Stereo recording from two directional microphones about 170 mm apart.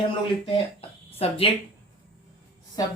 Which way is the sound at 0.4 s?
35° left (ahead or behind).